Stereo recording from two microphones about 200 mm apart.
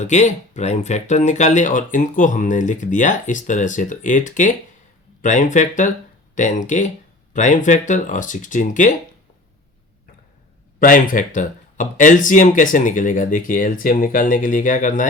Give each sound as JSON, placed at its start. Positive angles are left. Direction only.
{"t": 0.0, "sound": "speech", "side_deg": 35}
{"t": 10.8, "sound": "speech", "side_deg": 40}